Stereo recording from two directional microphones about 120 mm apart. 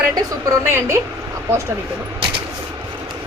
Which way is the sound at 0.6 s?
20° right (ahead or behind).